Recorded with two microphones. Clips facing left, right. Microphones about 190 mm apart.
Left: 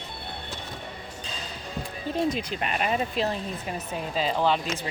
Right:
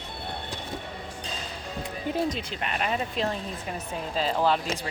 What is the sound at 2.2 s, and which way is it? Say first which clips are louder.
Speech: left 3 dB; 10° left (ahead or behind).